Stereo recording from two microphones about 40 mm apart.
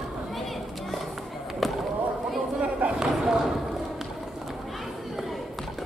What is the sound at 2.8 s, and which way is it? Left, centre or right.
Run, right.